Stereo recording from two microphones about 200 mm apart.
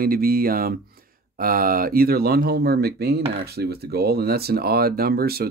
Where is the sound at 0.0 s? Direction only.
45° right (ahead or behind).